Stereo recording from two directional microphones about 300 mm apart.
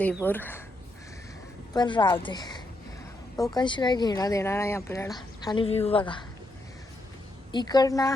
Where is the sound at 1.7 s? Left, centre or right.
Centre.